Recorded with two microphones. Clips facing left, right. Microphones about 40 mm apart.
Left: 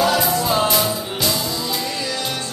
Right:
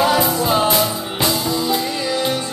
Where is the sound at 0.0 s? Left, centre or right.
Centre.